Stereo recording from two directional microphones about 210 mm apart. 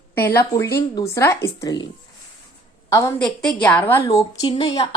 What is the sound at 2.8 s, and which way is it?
Speech, 15° left (ahead or behind).